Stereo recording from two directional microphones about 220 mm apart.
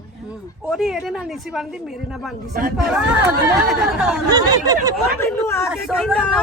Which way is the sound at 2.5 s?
40° right (ahead or behind).